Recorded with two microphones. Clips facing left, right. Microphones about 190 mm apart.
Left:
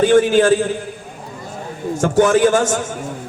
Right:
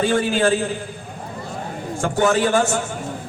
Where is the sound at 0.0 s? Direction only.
45° left (ahead or behind).